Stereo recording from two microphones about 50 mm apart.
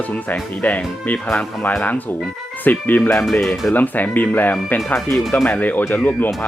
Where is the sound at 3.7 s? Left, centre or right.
Left.